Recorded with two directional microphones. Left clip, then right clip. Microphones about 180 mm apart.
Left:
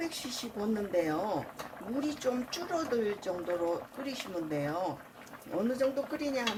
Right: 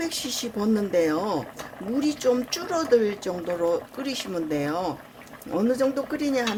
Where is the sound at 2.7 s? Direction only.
50° right (ahead or behind).